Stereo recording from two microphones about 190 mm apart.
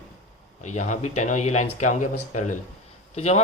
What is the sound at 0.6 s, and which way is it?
Speech, 40° left (ahead or behind).